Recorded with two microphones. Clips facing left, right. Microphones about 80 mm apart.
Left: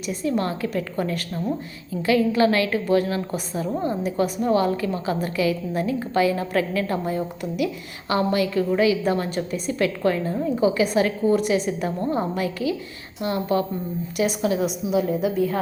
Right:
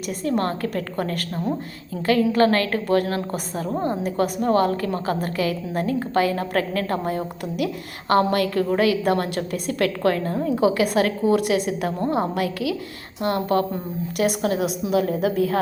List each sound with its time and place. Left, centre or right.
0.1 s a woman's voice: right
14.6 s a woman's voice: right